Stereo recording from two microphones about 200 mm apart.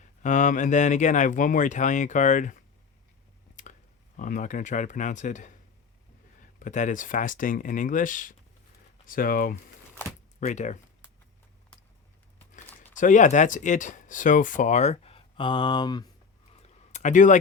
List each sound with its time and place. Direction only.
0.2 s speech: 40° left (ahead or behind)
3.5 s a sound: 40° left (ahead or behind)
4.2 s speech: 40° left (ahead or behind)
6.6 s speech: 40° left (ahead or behind)
13.0 s speech: 40° left (ahead or behind); by 16.0 s 20° left (ahead or behind)
16.5 s a sound: 30° left (ahead or behind)